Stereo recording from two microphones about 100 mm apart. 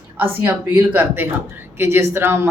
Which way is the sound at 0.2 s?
20° right (ahead or behind).